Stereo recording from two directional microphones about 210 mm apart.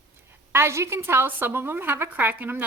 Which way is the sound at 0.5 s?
10° right (ahead or behind).